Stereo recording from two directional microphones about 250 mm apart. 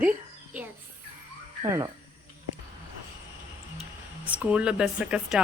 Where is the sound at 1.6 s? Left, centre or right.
Centre.